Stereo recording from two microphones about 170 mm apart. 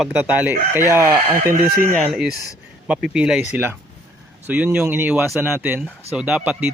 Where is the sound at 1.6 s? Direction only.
60° right (ahead or behind).